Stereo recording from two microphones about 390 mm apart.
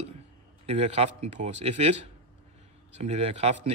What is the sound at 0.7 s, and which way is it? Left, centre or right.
A man's voice, centre.